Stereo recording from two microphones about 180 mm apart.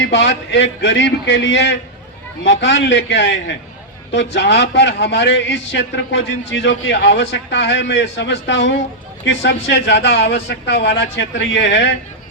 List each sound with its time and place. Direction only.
0.0 s a man's voice: 90° left